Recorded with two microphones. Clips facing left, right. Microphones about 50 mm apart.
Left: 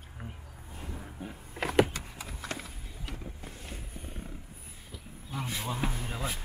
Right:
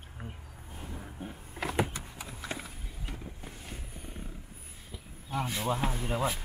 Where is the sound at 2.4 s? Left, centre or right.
Centre.